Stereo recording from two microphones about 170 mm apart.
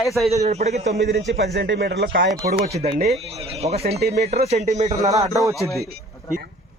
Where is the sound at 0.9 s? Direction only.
90° right.